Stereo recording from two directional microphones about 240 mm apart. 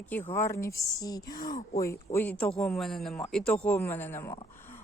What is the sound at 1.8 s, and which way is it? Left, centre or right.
A woman's voice, centre.